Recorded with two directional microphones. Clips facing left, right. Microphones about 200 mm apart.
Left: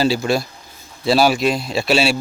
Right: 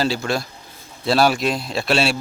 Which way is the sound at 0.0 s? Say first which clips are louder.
Left 4 dB; 5° left (ahead or behind).